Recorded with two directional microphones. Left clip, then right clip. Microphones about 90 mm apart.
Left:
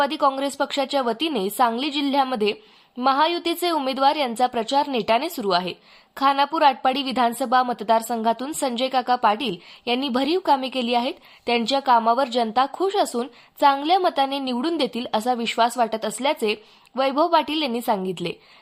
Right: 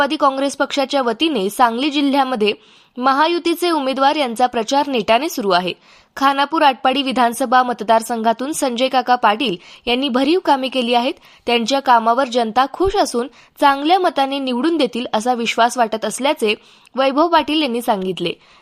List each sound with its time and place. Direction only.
0.0 s a woman's voice: 35° right (ahead or behind)